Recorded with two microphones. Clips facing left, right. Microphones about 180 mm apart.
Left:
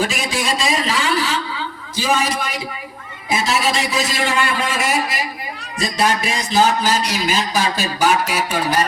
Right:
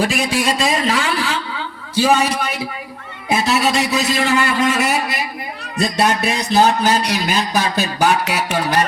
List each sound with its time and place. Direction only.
0.0 s speech: 60° right (ahead or behind)